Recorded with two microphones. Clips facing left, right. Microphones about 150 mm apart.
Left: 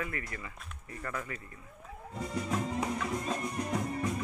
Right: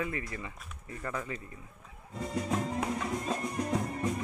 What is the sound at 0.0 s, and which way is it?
Speech, 20° right (ahead or behind).